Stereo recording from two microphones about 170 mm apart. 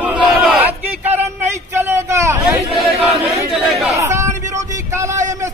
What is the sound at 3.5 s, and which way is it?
Chatter, centre (ahead or behind).